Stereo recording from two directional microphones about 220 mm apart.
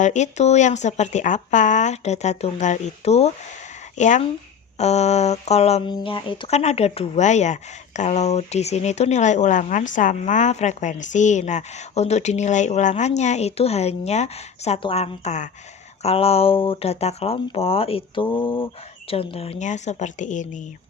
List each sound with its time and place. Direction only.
0.0 s speech: 30° left (ahead or behind)